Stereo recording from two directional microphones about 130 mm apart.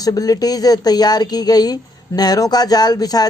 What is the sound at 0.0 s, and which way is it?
A woman's voice, 30° left (ahead or behind).